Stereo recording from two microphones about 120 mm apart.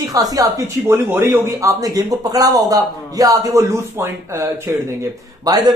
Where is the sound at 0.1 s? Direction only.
30° right (ahead or behind).